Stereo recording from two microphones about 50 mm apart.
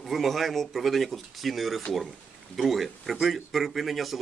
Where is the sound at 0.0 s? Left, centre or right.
Centre.